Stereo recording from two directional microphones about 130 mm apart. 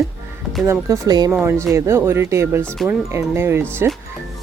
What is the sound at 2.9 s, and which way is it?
Speech, 20° right (ahead or behind).